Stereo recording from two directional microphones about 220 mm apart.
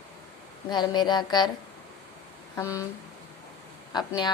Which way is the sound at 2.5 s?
15° left (ahead or behind).